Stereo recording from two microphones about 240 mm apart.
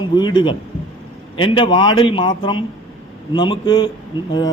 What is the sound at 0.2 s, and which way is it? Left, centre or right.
A man's voice, centre.